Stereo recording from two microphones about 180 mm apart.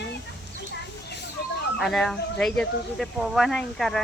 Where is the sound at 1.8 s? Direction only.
Centre (ahead or behind).